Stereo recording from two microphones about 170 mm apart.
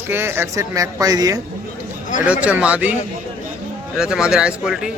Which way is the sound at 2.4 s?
10° right (ahead or behind).